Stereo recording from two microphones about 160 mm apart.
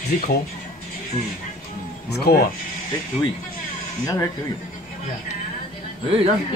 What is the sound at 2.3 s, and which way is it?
Speech, 75° left (ahead or behind).